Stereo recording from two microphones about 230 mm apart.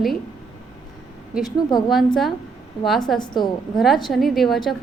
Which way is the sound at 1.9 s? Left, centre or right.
Centre.